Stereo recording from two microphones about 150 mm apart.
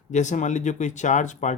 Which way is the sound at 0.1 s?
55° left (ahead or behind).